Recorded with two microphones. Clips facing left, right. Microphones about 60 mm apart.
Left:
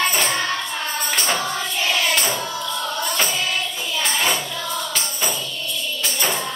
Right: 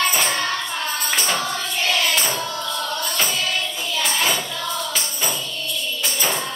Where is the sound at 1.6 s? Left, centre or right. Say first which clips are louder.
Even; centre.